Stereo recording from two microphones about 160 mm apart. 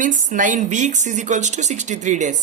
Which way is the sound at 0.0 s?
50° right (ahead or behind).